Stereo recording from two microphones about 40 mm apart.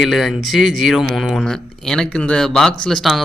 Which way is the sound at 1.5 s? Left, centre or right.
Centre.